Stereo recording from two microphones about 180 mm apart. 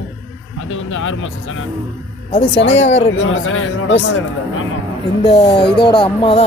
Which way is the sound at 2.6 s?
90° left.